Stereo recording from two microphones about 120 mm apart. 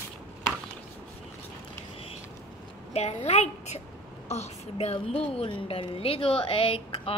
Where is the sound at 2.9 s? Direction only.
65° left (ahead or behind).